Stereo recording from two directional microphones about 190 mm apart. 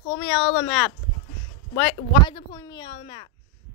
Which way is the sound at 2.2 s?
20° left (ahead or behind).